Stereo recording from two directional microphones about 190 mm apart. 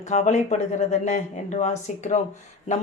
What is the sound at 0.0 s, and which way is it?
Speech, 40° left (ahead or behind).